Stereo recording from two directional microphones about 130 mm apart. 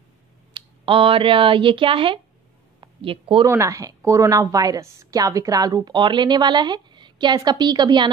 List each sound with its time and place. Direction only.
0.5 s a woman's voice: 40° right (ahead or behind)
3.4 s a woman's voice: 20° right (ahead or behind)